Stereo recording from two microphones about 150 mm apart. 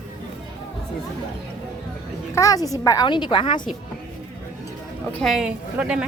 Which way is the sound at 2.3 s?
25° left (ahead or behind).